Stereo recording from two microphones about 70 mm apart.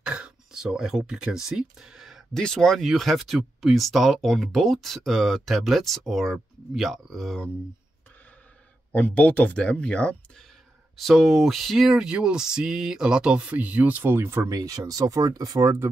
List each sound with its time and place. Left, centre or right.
0.0 s speech: centre
2.3 s speech: centre
8.9 s speech: centre
11.0 s speech: centre; by 14.5 s right
14.5 s speech: right
15.6 s speech: right